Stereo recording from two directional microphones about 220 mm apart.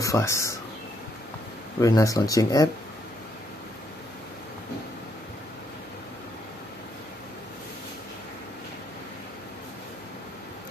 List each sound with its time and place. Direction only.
0.0 s speech: 15° left (ahead or behind)
1.8 s speech: 15° left (ahead or behind)